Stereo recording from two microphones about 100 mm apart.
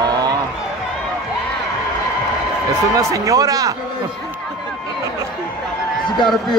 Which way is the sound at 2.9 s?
35° right (ahead or behind).